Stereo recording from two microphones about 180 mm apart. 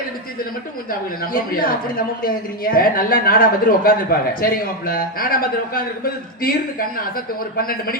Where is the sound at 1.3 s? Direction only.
50° left (ahead or behind).